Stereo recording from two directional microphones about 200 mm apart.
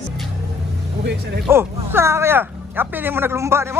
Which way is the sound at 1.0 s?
55° right (ahead or behind).